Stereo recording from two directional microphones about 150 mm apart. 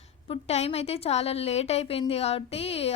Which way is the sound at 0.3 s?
45° left (ahead or behind).